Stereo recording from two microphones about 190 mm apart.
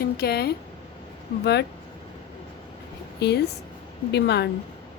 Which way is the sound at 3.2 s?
60° left (ahead or behind).